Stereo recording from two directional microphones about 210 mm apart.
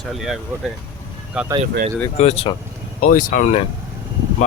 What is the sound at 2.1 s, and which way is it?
Speech, 30° left (ahead or behind).